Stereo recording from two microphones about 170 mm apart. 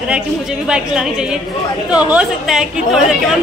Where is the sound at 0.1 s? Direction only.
5° right (ahead or behind).